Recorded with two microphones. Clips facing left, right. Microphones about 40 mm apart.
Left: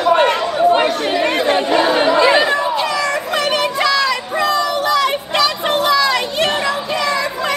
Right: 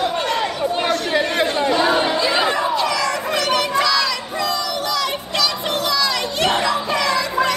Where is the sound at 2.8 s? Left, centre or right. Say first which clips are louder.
Left 2 dB; centre.